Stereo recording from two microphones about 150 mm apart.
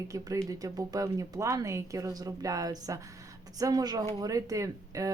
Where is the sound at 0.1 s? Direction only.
20° right (ahead or behind).